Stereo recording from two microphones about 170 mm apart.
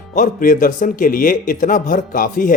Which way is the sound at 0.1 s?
50° left (ahead or behind).